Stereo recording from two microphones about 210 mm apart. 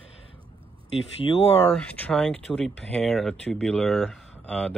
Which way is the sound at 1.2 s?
25° left (ahead or behind).